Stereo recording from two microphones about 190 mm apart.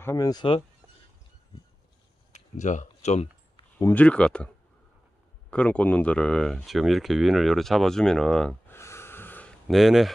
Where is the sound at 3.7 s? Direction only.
10° left (ahead or behind).